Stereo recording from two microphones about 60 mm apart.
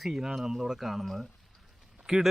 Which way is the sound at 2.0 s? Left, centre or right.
Centre.